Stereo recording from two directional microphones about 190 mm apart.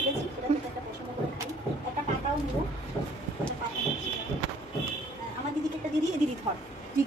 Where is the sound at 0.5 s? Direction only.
35° right (ahead or behind).